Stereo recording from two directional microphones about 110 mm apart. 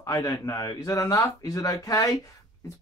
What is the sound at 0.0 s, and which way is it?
Speech, 30° left (ahead or behind).